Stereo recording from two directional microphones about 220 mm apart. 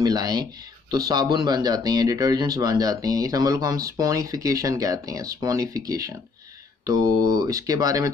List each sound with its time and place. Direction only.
0.0 s speech: 15° right (ahead or behind)